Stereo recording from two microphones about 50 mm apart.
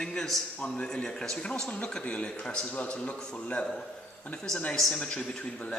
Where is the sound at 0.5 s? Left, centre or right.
Left.